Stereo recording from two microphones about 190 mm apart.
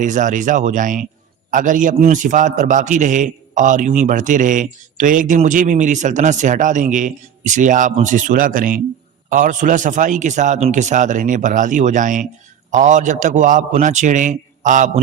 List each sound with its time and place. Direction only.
0.0 s a man's voice: 40° right (ahead or behind)